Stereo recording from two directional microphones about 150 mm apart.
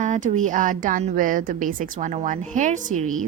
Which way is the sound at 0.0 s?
55° right (ahead or behind).